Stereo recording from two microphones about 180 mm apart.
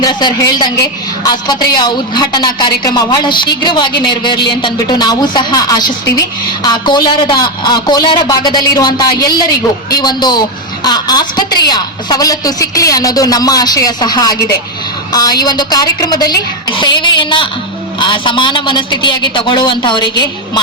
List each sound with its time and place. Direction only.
0.0 s a woman's voice: 25° left (ahead or behind)